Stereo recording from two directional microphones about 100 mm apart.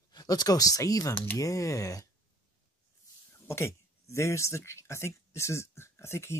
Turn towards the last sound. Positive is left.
turn(degrees=25)  # may be behind; listen again after turning